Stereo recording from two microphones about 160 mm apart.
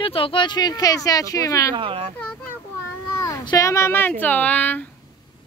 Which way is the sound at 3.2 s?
25° left (ahead or behind).